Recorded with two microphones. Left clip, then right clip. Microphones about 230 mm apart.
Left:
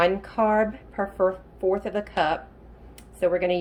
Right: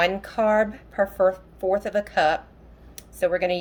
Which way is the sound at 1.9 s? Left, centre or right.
Centre.